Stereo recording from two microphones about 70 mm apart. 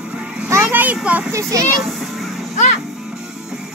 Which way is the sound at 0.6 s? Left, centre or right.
Right.